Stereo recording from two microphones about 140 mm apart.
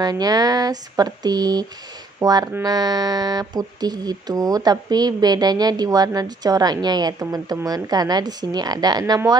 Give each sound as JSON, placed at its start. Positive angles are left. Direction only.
{"t": 0.0, "sound": "music", "side_deg": -30}
{"t": 2.1, "sound": "speech", "side_deg": -25}
{"t": 2.6, "sound": "music", "side_deg": -30}